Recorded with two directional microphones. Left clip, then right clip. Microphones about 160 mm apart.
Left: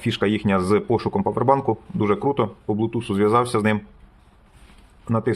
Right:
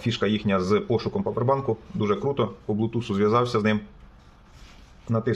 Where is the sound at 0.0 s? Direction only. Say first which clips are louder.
Left 3 dB; 35° left (ahead or behind).